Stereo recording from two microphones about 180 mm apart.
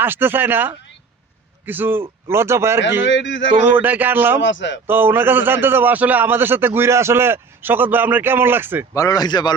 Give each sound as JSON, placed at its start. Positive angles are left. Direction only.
{"t": 0.0, "sound": "a man's voice", "side_deg": -10}
{"t": 3.0, "sound": "a man's voice", "side_deg": 90}
{"t": 3.7, "sound": "a man's voice", "side_deg": -10}
{"t": 4.4, "sound": "a man's voice", "side_deg": 90}
{"t": 4.9, "sound": "a man's voice", "side_deg": -10}
{"t": 9.0, "sound": "speech", "side_deg": 20}